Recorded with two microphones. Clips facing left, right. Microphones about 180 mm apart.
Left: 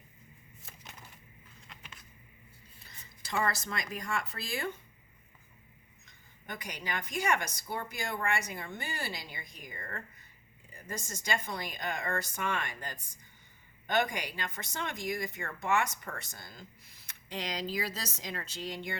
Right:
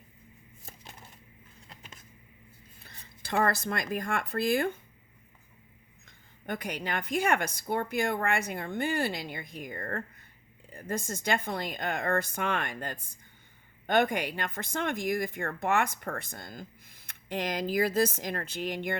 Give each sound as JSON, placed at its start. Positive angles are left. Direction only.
{"t": 0.6, "sound": "a sound", "side_deg": -30}
{"t": 3.2, "sound": "speech", "side_deg": -55}
{"t": 6.1, "sound": "speech", "side_deg": -55}